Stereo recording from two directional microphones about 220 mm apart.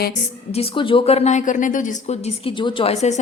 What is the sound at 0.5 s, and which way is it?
A woman's voice, 25° left (ahead or behind).